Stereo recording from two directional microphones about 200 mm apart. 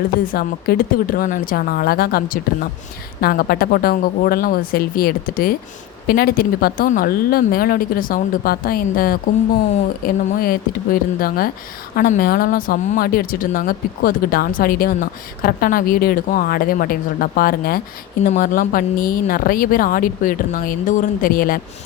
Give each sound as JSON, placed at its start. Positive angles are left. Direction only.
{"t": 0.3, "sound": "speech", "side_deg": 50}